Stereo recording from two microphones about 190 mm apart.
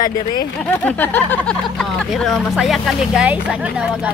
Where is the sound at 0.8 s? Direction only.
10° left (ahead or behind).